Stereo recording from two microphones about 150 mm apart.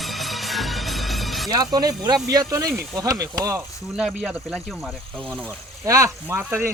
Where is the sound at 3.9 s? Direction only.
5° right (ahead or behind).